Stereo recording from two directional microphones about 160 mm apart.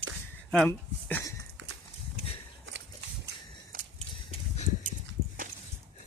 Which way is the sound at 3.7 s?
65° right (ahead or behind).